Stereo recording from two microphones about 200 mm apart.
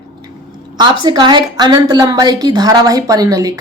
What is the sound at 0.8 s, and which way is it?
A woman's voice, 20° right (ahead or behind).